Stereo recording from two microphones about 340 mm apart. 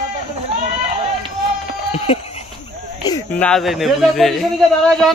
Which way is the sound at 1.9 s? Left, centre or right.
Centre.